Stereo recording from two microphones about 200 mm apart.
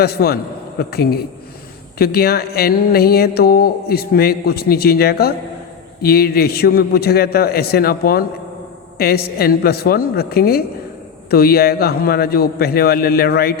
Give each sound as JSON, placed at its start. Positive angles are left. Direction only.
{"t": 0.0, "sound": "speech", "side_deg": 50}